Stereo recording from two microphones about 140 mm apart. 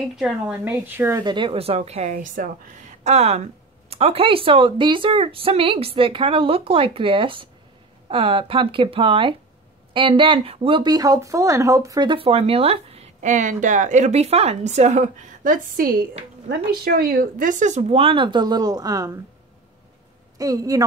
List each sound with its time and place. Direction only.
0.1 s speech: 5° right (ahead or behind)
0.7 s speech: 15° right (ahead or behind)
1.2 s a woman's voice: 35° right (ahead or behind)
1.8 s a woman's voice: 55° right (ahead or behind)
2.1 s a woman's voice: 70° right (ahead or behind)
17.9 s speech: 40° right (ahead or behind)
20.3 s speech: 25° right (ahead or behind)